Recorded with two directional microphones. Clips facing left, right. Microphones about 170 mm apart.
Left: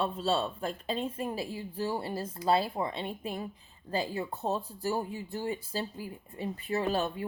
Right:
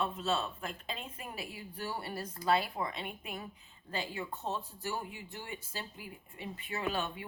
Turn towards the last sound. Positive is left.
turn(degrees=40)  # may be behind; listen again after turning